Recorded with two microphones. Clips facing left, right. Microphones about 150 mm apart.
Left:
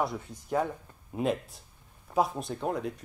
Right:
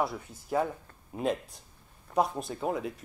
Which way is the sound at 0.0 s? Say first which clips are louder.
Even; 5° right (ahead or behind).